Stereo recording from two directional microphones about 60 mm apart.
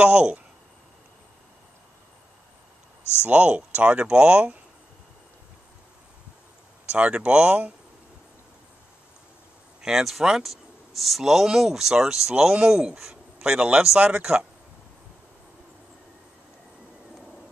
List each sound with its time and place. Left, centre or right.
0.0 s speech: centre
3.3 s speech: right
6.9 s speech: centre
9.8 s a man's voice: centre